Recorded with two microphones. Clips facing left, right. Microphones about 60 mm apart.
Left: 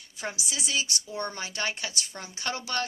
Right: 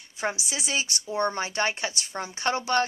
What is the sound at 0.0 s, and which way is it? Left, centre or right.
Speech, right.